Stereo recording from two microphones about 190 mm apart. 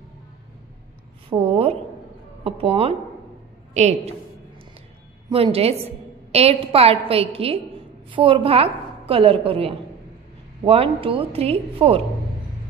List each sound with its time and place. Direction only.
1.3 s a woman's voice: 30° right (ahead or behind)
5.3 s a woman's voice: 30° right (ahead or behind)